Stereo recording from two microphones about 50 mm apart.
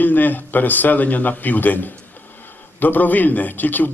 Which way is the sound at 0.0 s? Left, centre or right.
Left.